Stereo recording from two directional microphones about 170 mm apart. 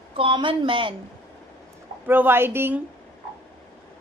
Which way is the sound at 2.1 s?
10° right (ahead or behind).